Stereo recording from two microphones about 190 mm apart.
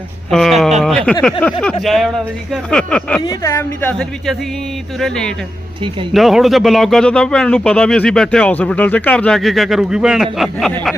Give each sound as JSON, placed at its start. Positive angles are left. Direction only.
{"t": 0.3, "sound": "a woman's voice", "side_deg": 0}
{"t": 3.2, "sound": "a woman's voice", "side_deg": 15}